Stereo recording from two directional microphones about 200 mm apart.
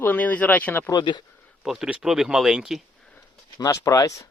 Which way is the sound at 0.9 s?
20° left (ahead or behind).